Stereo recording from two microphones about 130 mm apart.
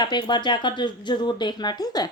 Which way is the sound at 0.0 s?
35° left (ahead or behind).